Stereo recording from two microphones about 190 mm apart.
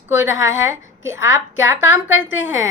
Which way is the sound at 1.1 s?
15° right (ahead or behind).